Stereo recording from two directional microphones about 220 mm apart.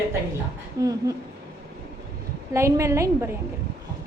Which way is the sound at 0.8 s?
15° right (ahead or behind).